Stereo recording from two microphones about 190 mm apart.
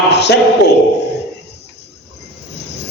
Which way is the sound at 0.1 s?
60° left (ahead or behind).